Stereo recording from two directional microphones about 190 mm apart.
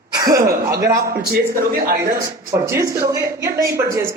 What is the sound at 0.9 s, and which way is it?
Speech, 55° right (ahead or behind).